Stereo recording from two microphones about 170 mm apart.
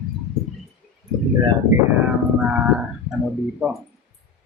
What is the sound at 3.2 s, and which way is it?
Speech, 5° right (ahead or behind).